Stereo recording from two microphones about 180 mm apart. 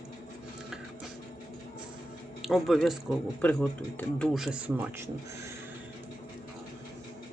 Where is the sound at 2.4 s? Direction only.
Centre (ahead or behind).